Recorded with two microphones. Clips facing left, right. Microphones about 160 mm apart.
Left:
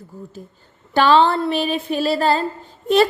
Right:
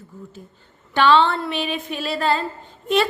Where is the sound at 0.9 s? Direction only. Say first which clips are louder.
Left 2 dB; 40° left (ahead or behind).